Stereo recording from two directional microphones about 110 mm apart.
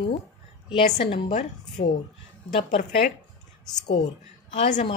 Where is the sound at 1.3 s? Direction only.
90° left.